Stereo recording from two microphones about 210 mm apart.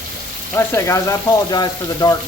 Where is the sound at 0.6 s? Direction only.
15° left (ahead or behind).